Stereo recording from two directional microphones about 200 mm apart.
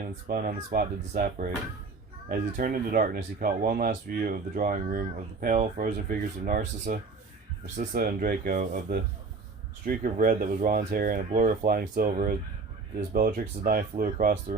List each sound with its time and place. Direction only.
0.3 s speech: 45° right (ahead or behind)